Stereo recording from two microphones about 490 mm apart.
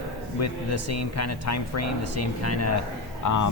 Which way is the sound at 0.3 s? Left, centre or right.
Left.